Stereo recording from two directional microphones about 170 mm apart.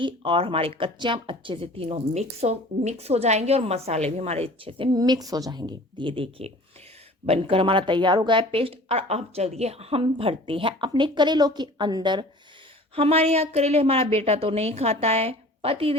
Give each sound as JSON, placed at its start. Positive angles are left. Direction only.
{"t": 0.0, "sound": "speech", "side_deg": -30}
{"t": 13.0, "sound": "speech", "side_deg": -35}